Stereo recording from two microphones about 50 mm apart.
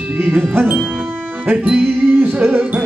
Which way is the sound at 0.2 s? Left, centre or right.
Right.